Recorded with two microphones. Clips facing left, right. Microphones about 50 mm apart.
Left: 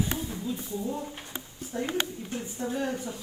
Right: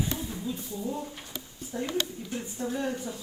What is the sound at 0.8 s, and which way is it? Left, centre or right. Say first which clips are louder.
Speech: right 1 dB; centre.